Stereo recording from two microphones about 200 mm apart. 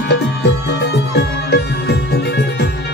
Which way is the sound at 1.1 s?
55° left (ahead or behind).